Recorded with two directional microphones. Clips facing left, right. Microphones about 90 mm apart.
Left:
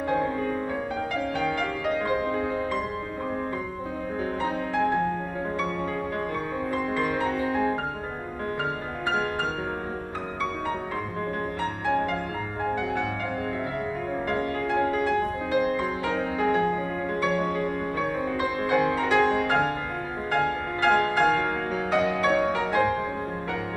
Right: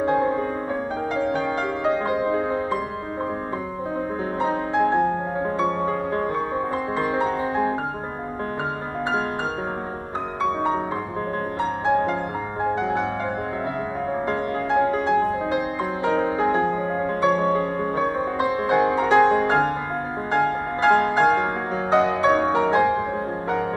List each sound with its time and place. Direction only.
0.0 s music: 25° right (ahead or behind)
4.4 s music: 30° right (ahead or behind)
11.8 s music: 25° right (ahead or behind)
14.3 s music: 25° right (ahead or behind)